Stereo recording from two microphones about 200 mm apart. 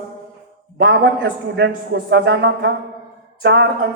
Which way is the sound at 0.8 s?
55° right (ahead or behind).